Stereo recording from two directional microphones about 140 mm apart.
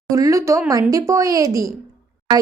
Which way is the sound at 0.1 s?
25° right (ahead or behind).